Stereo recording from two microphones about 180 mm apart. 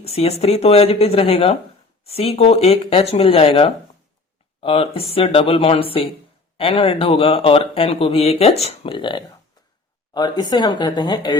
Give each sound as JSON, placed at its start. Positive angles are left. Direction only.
{"t": 0.0, "sound": "speech", "side_deg": 35}